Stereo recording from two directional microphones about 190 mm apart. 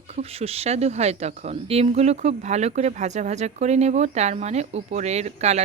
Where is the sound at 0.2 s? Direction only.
30° right (ahead or behind).